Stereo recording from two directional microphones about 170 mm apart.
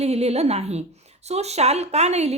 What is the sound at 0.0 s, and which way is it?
A woman's voice, 40° right (ahead or behind).